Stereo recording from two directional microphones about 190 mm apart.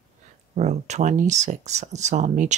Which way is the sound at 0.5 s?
35° right (ahead or behind).